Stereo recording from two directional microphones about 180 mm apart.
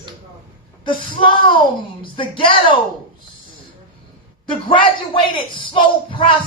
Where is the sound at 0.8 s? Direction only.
25° left (ahead or behind).